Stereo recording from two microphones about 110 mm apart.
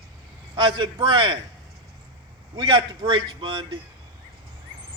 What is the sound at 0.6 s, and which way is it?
Speech, 45° right (ahead or behind).